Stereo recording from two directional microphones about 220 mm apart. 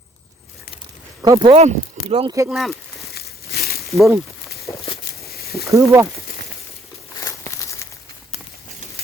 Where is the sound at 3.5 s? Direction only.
45° left (ahead or behind).